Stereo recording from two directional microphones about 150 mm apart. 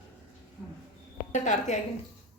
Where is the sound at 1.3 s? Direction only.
55° left (ahead or behind).